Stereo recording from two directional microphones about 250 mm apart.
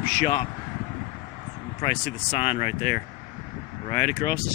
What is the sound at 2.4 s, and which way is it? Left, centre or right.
Speech, left.